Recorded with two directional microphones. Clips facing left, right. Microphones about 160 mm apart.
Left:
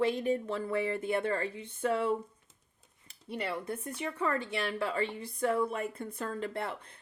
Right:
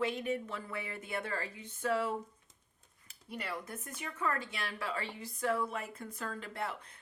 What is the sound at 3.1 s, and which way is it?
Speech, 30° left (ahead or behind).